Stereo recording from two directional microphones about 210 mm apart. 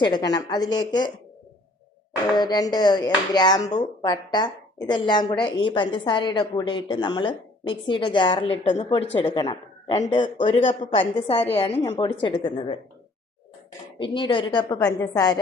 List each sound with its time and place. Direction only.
0.0 s a woman's voice: 20° left (ahead or behind)
2.3 s a woman's voice: 20° left (ahead or behind)
8.6 s speech: 35° left (ahead or behind)
9.1 s a woman's voice: 20° left (ahead or behind)
14.0 s a woman's voice: 25° left (ahead or behind)